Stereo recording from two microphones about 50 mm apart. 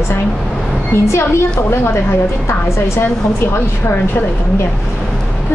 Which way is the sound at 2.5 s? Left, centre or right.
Left.